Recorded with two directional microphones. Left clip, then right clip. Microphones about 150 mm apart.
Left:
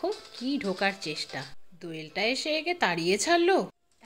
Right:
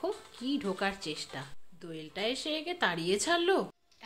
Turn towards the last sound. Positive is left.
turn(degrees=25)  # may be behind; listen again after turning